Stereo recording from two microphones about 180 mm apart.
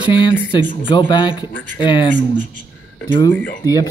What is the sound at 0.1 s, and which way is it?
Speech, 25° left (ahead or behind).